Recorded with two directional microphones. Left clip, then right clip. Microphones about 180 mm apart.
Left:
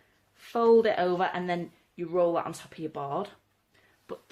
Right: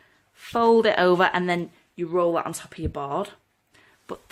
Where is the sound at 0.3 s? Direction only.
30° right (ahead or behind).